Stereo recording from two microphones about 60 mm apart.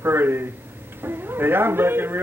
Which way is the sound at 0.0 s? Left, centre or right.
Right.